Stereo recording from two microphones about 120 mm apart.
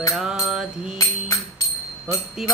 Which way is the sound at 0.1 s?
5° right (ahead or behind).